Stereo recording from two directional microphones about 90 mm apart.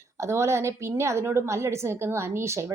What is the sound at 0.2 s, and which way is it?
A woman's voice, 35° right (ahead or behind).